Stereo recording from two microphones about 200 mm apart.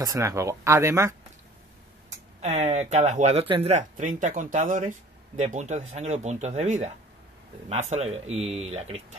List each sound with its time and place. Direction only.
0.0 s speech: 15° right (ahead or behind)
2.4 s speech: 35° right (ahead or behind)